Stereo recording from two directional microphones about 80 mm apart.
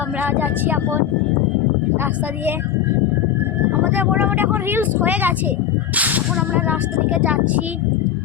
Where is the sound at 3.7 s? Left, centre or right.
Right.